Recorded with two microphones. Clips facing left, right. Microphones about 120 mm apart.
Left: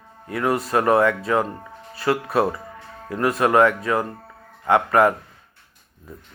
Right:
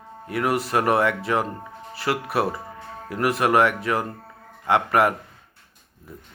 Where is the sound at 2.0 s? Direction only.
25° left (ahead or behind).